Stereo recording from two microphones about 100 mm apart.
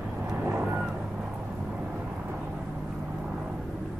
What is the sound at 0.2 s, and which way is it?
Vehicle, 20° right (ahead or behind).